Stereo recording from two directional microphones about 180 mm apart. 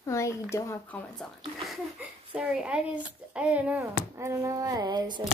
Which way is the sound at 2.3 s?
5° right (ahead or behind).